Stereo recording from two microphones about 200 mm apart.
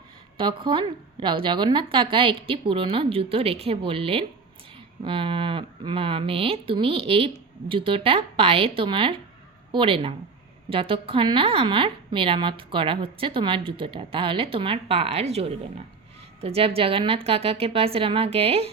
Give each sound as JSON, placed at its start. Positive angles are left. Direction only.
{"t": 0.3, "sound": "a woman's voice", "side_deg": -25}